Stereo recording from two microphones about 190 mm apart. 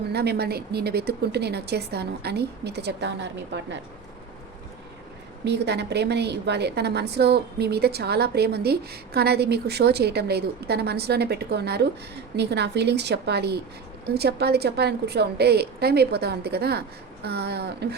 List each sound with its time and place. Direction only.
0.1 s a woman's voice: 60° right (ahead or behind)
5.5 s a woman's voice: 60° right (ahead or behind)